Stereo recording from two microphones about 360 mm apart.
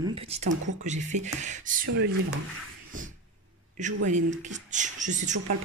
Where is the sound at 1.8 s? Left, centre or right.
Right.